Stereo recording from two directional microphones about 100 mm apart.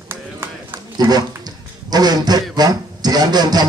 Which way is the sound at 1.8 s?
45° right (ahead or behind).